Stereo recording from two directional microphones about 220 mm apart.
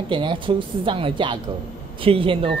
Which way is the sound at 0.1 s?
20° right (ahead or behind).